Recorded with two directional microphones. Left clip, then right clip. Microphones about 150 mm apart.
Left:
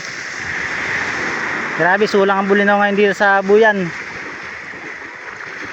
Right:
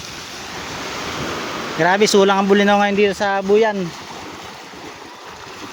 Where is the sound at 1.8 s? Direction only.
40° right (ahead or behind).